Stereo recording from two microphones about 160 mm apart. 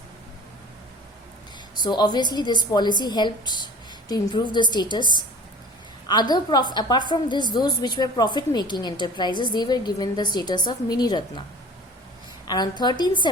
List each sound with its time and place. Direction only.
1.8 s a woman's voice: 25° left (ahead or behind)
12.5 s a woman's voice: 25° left (ahead or behind)